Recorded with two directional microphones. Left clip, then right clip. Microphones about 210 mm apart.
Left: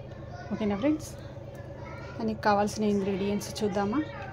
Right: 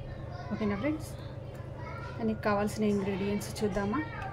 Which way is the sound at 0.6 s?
20° left (ahead or behind).